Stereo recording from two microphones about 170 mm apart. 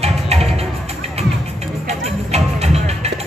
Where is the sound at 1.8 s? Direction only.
40° right (ahead or behind).